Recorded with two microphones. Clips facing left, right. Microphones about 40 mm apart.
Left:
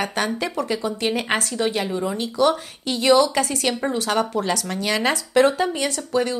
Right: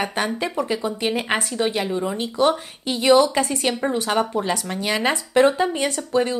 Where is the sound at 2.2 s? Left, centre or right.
Right.